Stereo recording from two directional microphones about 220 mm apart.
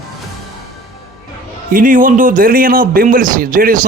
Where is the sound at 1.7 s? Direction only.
40° right (ahead or behind).